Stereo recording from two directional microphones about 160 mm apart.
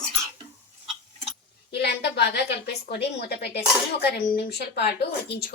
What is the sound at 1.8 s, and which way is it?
A woman's voice, 90° left.